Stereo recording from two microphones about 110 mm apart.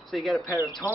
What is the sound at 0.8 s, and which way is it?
Speech, 35° left (ahead or behind).